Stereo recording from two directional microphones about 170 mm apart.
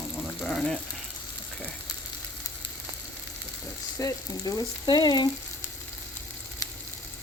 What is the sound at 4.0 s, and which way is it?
Frying, 20° left (ahead or behind).